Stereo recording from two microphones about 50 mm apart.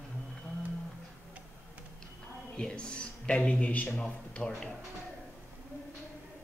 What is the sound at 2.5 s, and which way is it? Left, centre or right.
A man's voice, centre.